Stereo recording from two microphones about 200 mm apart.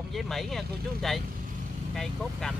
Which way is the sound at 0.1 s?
Centre (ahead or behind).